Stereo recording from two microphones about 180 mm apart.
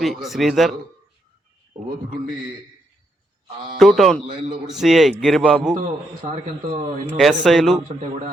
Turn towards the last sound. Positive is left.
turn(degrees=0)  # may be behind; listen again after turning